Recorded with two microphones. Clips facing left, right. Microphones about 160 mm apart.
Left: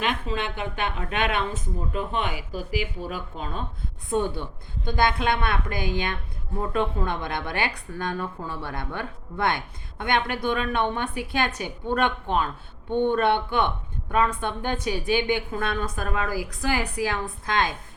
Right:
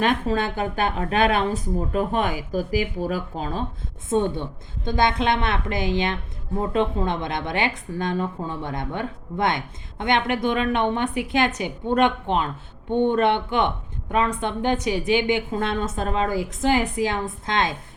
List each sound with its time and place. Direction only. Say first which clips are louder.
0.0 s speech: right 6 dB; 40° right (ahead or behind)
4.1 s a woman's voice: right 3 dB; 20° right (ahead or behind)